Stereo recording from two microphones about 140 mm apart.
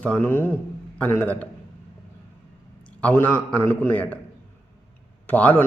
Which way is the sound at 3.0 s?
15° left (ahead or behind).